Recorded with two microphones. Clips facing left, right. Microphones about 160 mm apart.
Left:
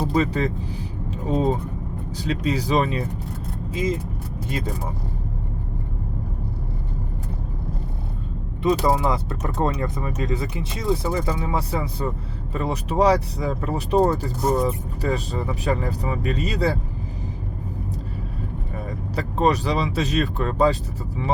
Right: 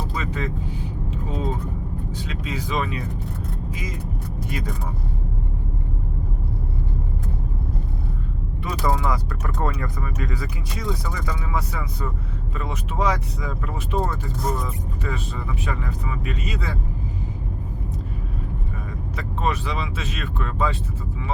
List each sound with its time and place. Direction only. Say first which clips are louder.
0.1 s speech: left 7 dB; 35° left (ahead or behind)
1.1 s vehicle: left 8 dB; 35° left (ahead or behind)
2.1 s speech: left 10 dB; 35° left (ahead or behind)
4.4 s speech: left 3 dB; 25° left (ahead or behind)
8.6 s speech: left 5 dB; 25° left (ahead or behind)
18.9 s speech: left 6 dB; 35° left (ahead or behind)